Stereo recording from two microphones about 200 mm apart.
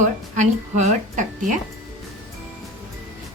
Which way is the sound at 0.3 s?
35° right (ahead or behind).